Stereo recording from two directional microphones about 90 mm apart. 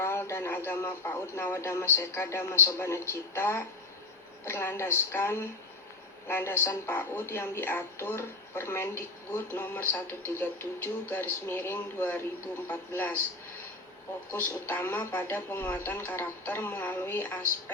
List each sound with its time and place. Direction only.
0.0 s speech: 30° left (ahead or behind)
14.3 s speech: 20° left (ahead or behind)